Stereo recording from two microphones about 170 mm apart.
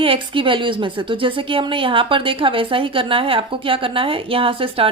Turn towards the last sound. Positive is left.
turn(degrees=-30)  # may be behind; listen again after turning